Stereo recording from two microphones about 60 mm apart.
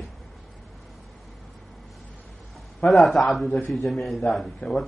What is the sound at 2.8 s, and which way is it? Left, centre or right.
Speech, left.